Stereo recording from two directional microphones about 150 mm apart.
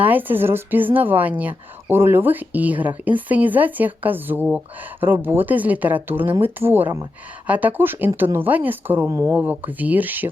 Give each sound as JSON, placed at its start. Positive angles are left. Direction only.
{"t": 0.0, "sound": "a woman's voice", "side_deg": -10}